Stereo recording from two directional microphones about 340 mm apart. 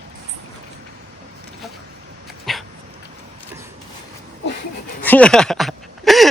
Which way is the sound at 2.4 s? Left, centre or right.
Centre.